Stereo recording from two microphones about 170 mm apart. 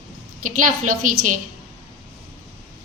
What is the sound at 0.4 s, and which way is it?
Speech, 50° right (ahead or behind).